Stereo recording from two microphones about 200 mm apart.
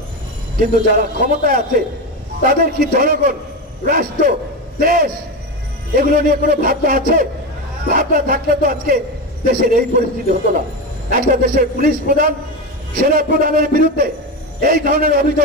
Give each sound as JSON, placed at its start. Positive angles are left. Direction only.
{"t": 0.6, "sound": "a man's voice", "side_deg": -45}